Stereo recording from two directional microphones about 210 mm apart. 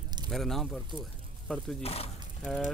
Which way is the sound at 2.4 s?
5° left (ahead or behind).